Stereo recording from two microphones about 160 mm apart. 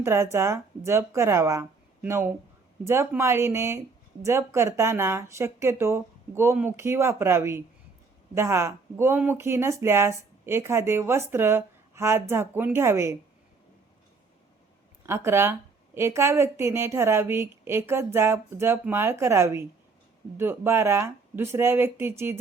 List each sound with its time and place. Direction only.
0.0 s speech: 15° right (ahead or behind)
15.0 s speech: 15° right (ahead or behind)